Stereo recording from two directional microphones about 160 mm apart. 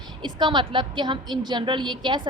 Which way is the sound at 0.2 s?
30° right (ahead or behind).